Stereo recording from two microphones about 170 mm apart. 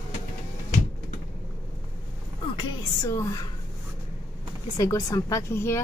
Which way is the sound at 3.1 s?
15° left (ahead or behind).